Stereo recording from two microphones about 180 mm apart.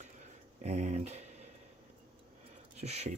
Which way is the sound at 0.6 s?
40° right (ahead or behind).